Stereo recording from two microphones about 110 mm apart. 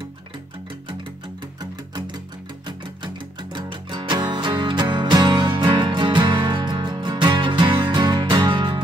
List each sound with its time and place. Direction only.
1.6 s music: 40° right (ahead or behind)